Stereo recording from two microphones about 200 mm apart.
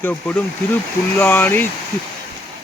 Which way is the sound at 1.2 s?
10° left (ahead or behind).